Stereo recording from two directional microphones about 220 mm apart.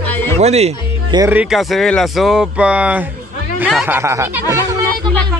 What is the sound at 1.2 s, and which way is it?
Speech, 5° right (ahead or behind).